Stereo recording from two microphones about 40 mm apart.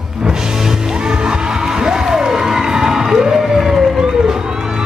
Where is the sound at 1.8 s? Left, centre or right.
Centre.